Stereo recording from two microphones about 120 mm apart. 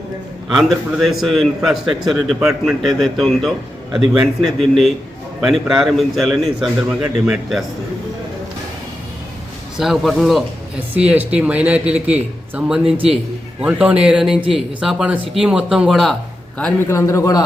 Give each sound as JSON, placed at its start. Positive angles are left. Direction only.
{"t": 0.5, "sound": "a man's voice", "side_deg": 0}
{"t": 9.7, "sound": "a man's voice", "side_deg": 0}
{"t": 10.9, "sound": "a man's voice", "side_deg": -10}
{"t": 16.8, "sound": "a man's voice", "side_deg": 25}